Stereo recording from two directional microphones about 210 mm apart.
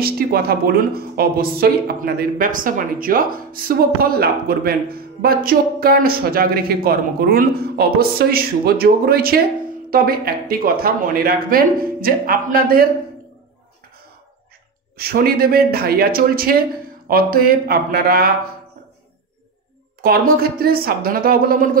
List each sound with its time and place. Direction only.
0.0 s a woman's voice: 45° right (ahead or behind)
15.0 s a woman's voice: 45° right (ahead or behind)
20.0 s a woman's voice: 45° right (ahead or behind)